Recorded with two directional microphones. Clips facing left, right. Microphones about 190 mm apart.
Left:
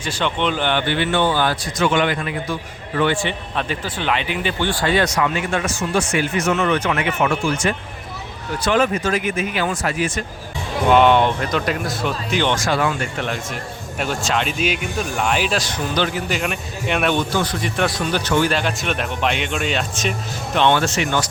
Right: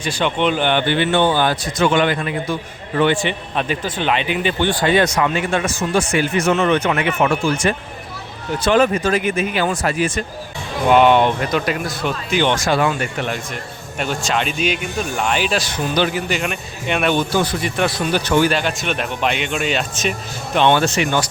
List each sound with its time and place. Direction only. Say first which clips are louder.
0.0 s a man's voice: right 3 dB; 15° right (ahead or behind)
1.8 s a man's voice: right 2 dB; 35° right (ahead or behind)
10.8 s speech: right 1 dB; 5° right (ahead or behind)
12.5 s a man's voice: right 2 dB; 20° right (ahead or behind)
13.1 s speech: right 1 dB; 5° right (ahead or behind)
18.5 s speech: right 1 dB; centre (ahead or behind)
20.6 s speech: right 2 dB; 15° right (ahead or behind)